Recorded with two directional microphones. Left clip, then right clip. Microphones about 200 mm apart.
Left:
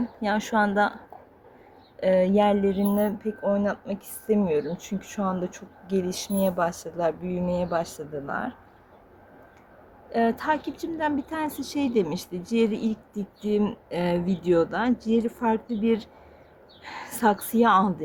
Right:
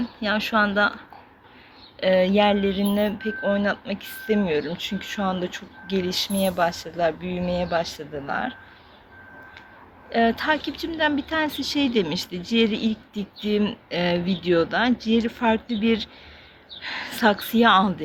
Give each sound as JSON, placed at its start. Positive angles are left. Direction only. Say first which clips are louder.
{"t": 0.2, "sound": "speech", "louder": "right 3 dB", "side_deg": 15}
{"t": 2.0, "sound": "speech", "louder": "right 2 dB", "side_deg": 10}
{"t": 10.1, "sound": "speech", "louder": "right 3 dB", "side_deg": 10}